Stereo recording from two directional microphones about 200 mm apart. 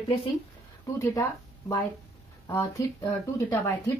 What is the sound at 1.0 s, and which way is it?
Speech, 15° left (ahead or behind).